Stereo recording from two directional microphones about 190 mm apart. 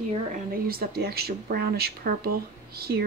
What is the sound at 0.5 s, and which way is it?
Speech, 50° right (ahead or behind).